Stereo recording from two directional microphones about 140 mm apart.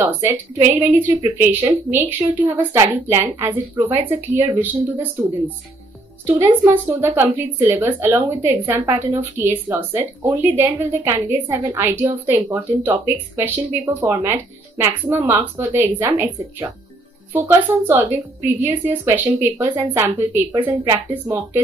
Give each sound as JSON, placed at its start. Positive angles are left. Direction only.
{"t": 0.0, "sound": "a woman's voice", "side_deg": -20}
{"t": 6.7, "sound": "a woman's voice", "side_deg": -15}